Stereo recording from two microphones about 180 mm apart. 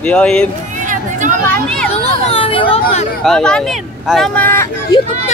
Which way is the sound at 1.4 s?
10° left (ahead or behind).